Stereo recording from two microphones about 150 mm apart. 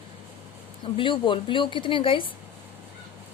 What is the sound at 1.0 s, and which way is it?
A woman's voice, 35° left (ahead or behind).